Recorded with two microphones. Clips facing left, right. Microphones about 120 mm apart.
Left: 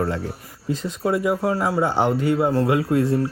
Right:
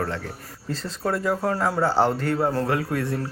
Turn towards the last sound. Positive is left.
turn(degrees=25)  # may be behind; listen again after turning